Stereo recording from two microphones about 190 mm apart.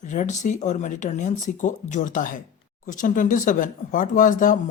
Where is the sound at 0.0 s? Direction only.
40° left (ahead or behind).